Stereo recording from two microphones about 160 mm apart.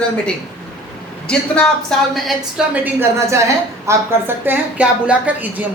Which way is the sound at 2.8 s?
15° right (ahead or behind).